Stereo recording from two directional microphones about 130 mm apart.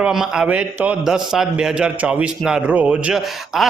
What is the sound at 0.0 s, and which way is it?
A man's voice, 5° right (ahead or behind).